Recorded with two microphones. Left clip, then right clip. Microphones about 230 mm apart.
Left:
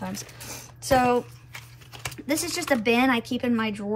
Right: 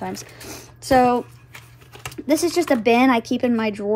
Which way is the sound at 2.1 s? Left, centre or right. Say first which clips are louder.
Right 8 dB; centre.